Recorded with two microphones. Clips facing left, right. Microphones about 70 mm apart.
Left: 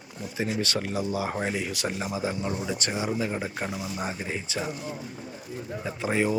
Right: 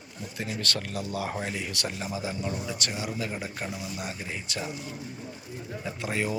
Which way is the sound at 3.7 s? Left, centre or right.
Left.